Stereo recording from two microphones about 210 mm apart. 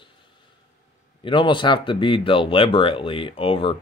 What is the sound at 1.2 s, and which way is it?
Speech, 25° left (ahead or behind).